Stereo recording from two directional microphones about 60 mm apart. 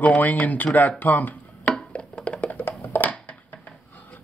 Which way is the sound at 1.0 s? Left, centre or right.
Left.